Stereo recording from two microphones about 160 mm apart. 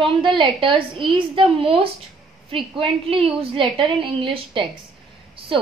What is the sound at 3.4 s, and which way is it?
A woman's voice, 35° right (ahead or behind).